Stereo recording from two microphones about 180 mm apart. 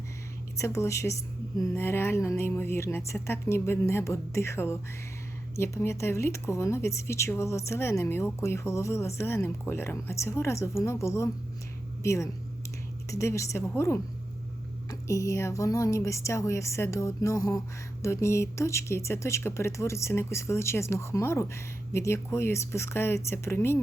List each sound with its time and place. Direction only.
0.5 s speech: 15° left (ahead or behind)